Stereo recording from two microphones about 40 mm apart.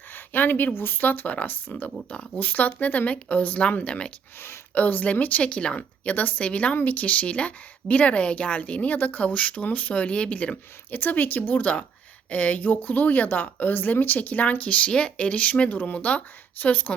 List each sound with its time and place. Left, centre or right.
0.1 s speech: left
2.0 s speech: left
2.4 s speech: left
3.6 s speech: left
4.7 s speech: left
5.4 s speech: left
6.1 s speech: left
6.4 s speech: left
10.9 s speech: left
14.2 s speech: left
15.7 s speech: left